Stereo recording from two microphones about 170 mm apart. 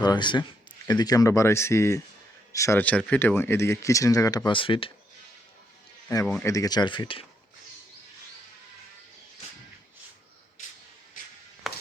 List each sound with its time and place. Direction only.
0.0 s speech: 25° left (ahead or behind)
6.4 s speech: 20° left (ahead or behind)
11.6 s a sound: centre (ahead or behind)